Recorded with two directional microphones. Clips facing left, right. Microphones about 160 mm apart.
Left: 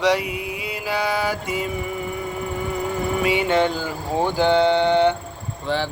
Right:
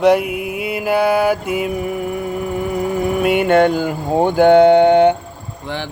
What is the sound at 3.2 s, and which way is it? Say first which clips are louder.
Mantra: right 7 dB; 55° right (ahead or behind).